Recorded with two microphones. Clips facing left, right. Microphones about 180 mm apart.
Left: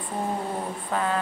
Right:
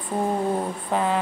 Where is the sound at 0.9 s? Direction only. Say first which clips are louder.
Right 3 dB; 25° right (ahead or behind).